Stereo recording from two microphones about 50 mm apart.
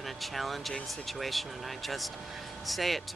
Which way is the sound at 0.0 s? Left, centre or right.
Centre.